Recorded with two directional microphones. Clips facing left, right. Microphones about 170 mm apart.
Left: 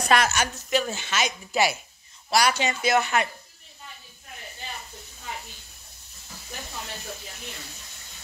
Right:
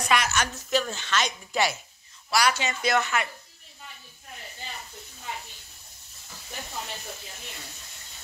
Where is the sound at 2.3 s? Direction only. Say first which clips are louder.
Left 2 dB; 20° left (ahead or behind).